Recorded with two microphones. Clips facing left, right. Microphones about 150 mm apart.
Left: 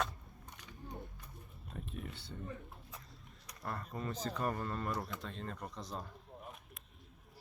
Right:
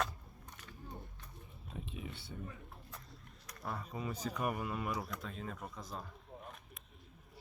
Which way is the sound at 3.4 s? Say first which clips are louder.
Even; centre (ahead or behind).